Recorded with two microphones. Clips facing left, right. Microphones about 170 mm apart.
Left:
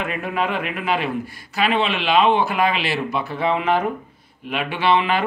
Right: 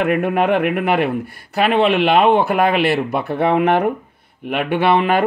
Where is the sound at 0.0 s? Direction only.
60° right (ahead or behind).